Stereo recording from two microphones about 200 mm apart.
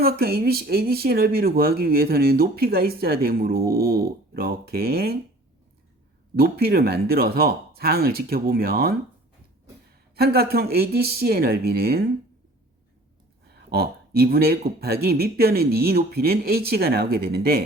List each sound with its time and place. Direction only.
0.0 s speech: 50° right (ahead or behind)
6.3 s speech: 50° right (ahead or behind)
10.2 s speech: 50° right (ahead or behind)
13.5 s speech: 50° right (ahead or behind)